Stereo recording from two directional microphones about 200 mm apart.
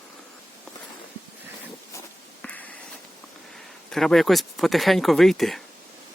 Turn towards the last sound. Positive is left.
turn(degrees=0)  # may be behind; listen again after turning